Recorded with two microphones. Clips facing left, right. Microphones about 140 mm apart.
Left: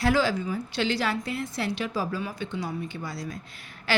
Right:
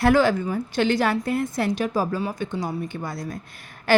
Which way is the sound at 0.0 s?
55° right (ahead or behind).